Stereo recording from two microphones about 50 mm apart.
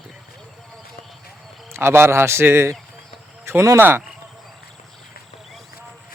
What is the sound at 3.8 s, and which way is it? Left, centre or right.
Speech, right.